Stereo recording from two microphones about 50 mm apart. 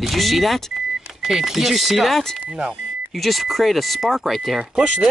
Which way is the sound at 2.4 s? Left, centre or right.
Centre.